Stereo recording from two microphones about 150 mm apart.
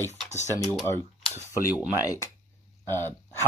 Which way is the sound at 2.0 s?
25° left (ahead or behind).